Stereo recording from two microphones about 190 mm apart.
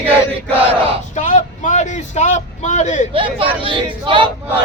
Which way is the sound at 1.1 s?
40° left (ahead or behind).